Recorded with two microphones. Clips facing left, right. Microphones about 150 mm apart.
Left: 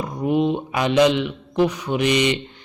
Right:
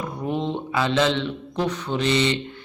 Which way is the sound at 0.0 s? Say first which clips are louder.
Left 6 dB; 10° left (ahead or behind).